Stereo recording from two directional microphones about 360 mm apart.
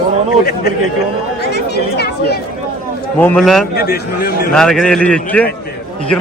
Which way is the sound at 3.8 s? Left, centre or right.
Left.